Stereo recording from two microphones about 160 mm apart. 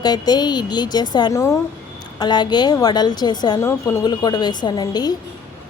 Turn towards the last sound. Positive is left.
turn(degrees=25)  # may be behind; listen again after turning